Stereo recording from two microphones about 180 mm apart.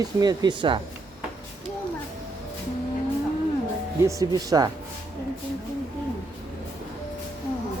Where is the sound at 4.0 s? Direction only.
15° right (ahead or behind).